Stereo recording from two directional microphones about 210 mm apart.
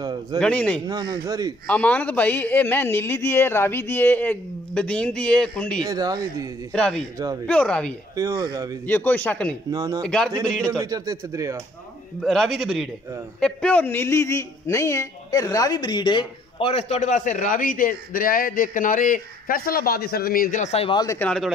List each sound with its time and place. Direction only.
0.0 s a sound: 20° right (ahead or behind)
0.4 s a man's voice: 5° left (ahead or behind)
0.8 s speech: 20° right (ahead or behind)
1.7 s a man's voice: 5° left (ahead or behind)
5.8 s speech: 20° right (ahead or behind)
6.7 s a man's voice: 5° left (ahead or behind)
8.2 s speech: 15° right (ahead or behind)
8.8 s a man's voice: 10° left (ahead or behind)
9.7 s speech: 15° right (ahead or behind)
10.0 s a man's voice: 5° left (ahead or behind)
10.8 s speech: 15° right (ahead or behind)
12.2 s a man's voice: centre (ahead or behind); by 21.3 s 15° left (ahead or behind)
21.3 s a man's voice: centre (ahead or behind)